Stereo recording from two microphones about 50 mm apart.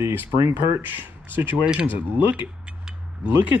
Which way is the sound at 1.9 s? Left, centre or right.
Right.